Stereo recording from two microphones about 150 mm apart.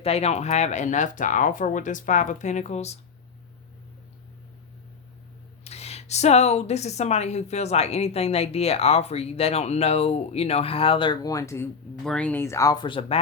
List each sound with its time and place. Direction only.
0.0 s a woman's voice: 45° left (ahead or behind)
5.6 s a woman's voice: 45° left (ahead or behind)